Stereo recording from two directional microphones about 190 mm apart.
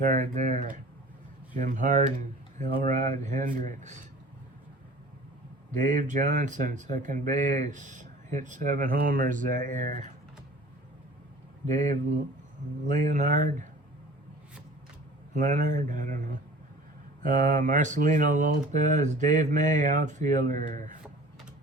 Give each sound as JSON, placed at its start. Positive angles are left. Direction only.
{"t": 0.0, "sound": "speech", "side_deg": -40}
{"t": 5.8, "sound": "speech", "side_deg": -45}
{"t": 11.7, "sound": "speech", "side_deg": -40}
{"t": 15.4, "sound": "speech", "side_deg": -40}